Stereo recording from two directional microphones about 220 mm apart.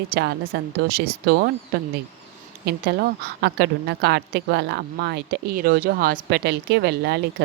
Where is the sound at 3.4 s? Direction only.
50° right (ahead or behind).